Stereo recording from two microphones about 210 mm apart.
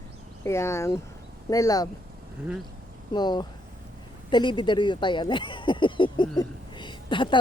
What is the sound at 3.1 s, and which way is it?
Speech, 20° left (ahead or behind).